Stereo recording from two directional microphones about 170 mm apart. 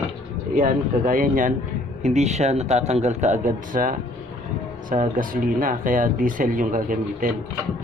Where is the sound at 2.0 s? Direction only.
40° right (ahead or behind).